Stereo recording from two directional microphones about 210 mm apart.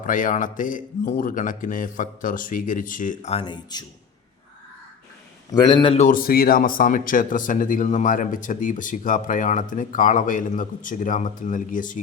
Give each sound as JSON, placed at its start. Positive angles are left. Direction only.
{"t": 0.0, "sound": "a man's voice", "side_deg": 40}
{"t": 5.5, "sound": "a man's voice", "side_deg": 20}